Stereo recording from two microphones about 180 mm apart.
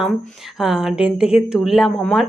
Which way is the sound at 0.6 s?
Centre (ahead or behind).